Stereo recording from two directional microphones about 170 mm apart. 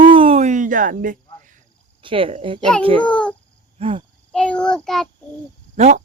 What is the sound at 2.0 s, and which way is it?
Speech, 30° right (ahead or behind).